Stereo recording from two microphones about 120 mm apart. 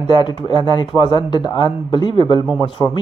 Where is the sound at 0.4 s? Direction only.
40° left (ahead or behind).